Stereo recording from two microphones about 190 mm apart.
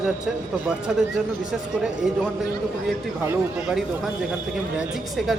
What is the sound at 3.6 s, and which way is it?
A man's voice, 5° right (ahead or behind).